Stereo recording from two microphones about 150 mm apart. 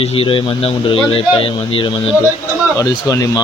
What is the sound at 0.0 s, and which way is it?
Speech, 40° left (ahead or behind).